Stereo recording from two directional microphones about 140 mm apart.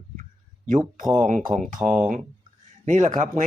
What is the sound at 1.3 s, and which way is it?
Speech, 70° right (ahead or behind).